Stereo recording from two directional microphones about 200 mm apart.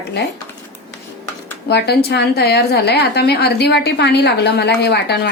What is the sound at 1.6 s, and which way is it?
A woman's voice, 55° left (ahead or behind).